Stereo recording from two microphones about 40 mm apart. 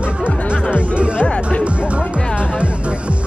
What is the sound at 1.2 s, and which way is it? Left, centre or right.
Music, left.